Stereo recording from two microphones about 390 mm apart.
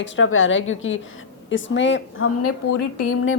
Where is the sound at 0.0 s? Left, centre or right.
Left.